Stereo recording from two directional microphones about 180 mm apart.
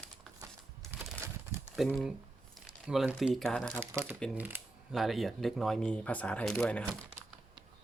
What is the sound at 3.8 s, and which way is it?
Speech, 15° right (ahead or behind).